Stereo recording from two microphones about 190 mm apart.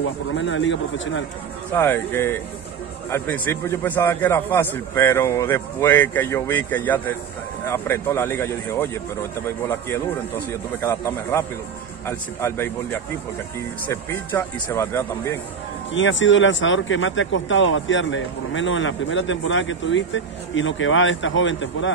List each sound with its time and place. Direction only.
0.0 s speech: 90° left
1.7 s a man's voice: 10° left (ahead or behind)
10.8 s a man's voice: 15° left (ahead or behind)
14.1 s a man's voice: 15° left (ahead or behind)
15.9 s speech: 80° left